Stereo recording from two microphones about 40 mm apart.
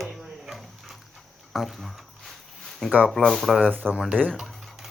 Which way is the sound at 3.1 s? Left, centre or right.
Centre.